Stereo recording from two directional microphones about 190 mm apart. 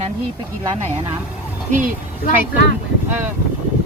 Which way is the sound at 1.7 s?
45° right (ahead or behind).